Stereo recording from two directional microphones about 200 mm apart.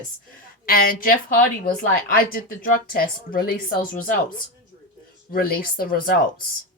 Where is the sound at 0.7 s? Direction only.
45° left (ahead or behind).